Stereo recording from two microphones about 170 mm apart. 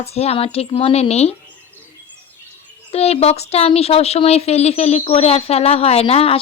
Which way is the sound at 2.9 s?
35° left (ahead or behind).